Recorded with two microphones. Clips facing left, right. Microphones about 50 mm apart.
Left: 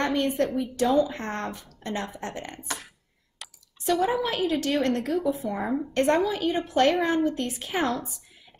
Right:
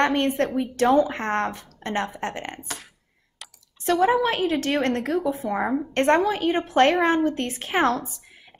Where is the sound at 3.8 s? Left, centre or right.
Right.